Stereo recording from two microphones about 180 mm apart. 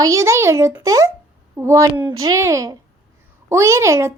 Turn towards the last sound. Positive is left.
turn(degrees=-15)  # may be behind; listen again after turning